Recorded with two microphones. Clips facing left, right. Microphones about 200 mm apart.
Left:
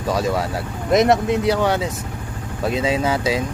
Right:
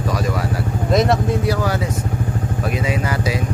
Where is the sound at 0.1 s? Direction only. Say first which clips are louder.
Left 4 dB; 25° left (ahead or behind).